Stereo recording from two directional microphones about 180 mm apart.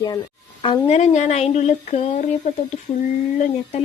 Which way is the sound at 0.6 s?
40° left (ahead or behind).